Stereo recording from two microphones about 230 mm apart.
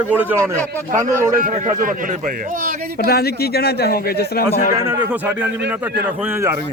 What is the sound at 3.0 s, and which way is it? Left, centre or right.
Speech, left.